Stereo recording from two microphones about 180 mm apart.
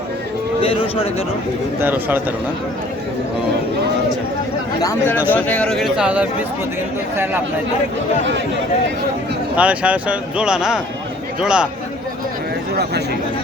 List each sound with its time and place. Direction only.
0.6 s speech: 30° left (ahead or behind)
1.8 s speech: 10° right (ahead or behind)
4.8 s speech: 15° left (ahead or behind); by 6.2 s 5° right (ahead or behind)
9.6 s speech: 5° right (ahead or behind)
12.7 s speech: 65° right (ahead or behind)